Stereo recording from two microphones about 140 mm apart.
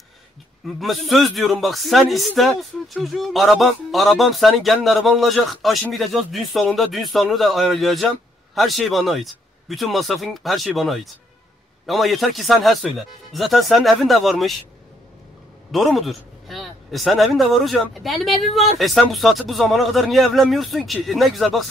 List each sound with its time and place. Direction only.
0.7 s speech: centre (ahead or behind)
15.7 s speech: centre (ahead or behind)